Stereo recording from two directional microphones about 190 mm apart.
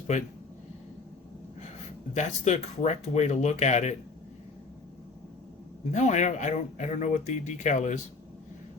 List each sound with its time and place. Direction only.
2.1 s speech: 35° left (ahead or behind)
5.9 s speech: 40° left (ahead or behind)